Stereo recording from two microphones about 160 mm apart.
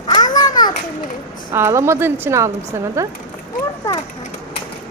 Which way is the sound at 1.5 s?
15° right (ahead or behind).